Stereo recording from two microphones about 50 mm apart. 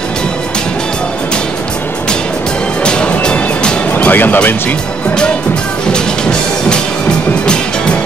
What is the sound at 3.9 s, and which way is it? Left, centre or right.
Speech, left.